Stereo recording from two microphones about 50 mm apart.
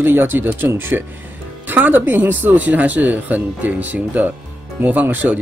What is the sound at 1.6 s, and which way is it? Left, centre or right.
Speech, right.